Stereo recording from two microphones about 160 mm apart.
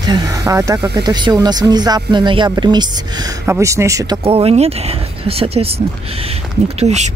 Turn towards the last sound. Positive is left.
turn(degrees=-45)  # may be behind; listen again after turning